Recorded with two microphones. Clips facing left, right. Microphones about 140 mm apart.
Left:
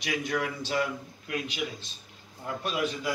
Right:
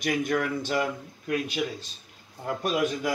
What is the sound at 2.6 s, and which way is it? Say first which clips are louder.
Speech: right 4 dB; 50° right (ahead or behind).